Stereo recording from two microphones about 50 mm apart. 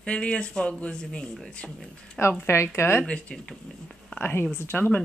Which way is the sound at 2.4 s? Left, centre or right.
Left.